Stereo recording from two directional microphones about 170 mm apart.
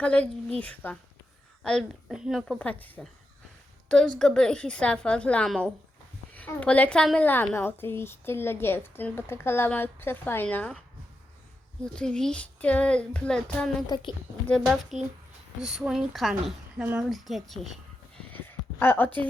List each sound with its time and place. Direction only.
0.0 s a woman's voice: 10° left (ahead or behind)
11.8 s a child's voice: 5° left (ahead or behind)
13.8 s a woman's voice: 25° left (ahead or behind)
14.4 s a child's voice: 5° left (ahead or behind)
18.3 s a woman's voice: 10° left (ahead or behind)